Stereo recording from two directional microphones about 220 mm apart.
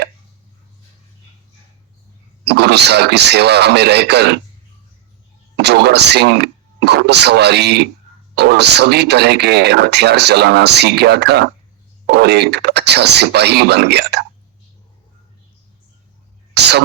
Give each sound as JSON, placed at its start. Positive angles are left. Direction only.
{"t": 2.4, "sound": "speech", "side_deg": -50}
{"t": 5.5, "sound": "speech", "side_deg": -50}
{"t": 16.6, "sound": "speech", "side_deg": -50}